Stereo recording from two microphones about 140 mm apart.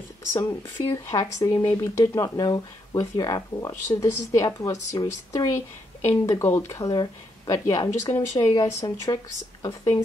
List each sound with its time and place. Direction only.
0.3 s speech: 20° left (ahead or behind)